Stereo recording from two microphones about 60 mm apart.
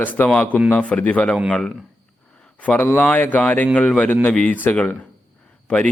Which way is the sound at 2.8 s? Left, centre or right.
Left.